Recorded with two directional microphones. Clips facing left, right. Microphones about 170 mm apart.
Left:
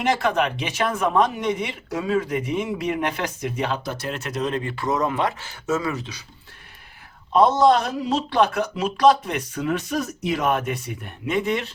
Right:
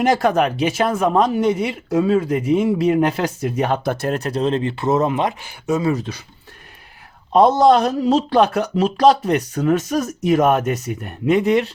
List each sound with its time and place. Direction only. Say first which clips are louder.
0.0 s speech: right 5 dB; 40° right (ahead or behind); by 5.8 s 15° right (ahead or behind)
5.9 s speech: right 8 dB; 50° right (ahead or behind)
7.3 s speech: right 4 dB; 40° right (ahead or behind)